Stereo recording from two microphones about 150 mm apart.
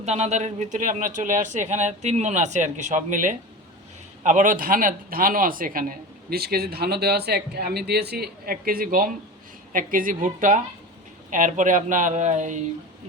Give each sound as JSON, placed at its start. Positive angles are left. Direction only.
{"t": 0.0, "sound": "a man's voice", "side_deg": -45}